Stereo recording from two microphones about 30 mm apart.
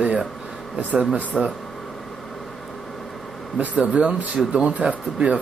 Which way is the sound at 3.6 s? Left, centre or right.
Right.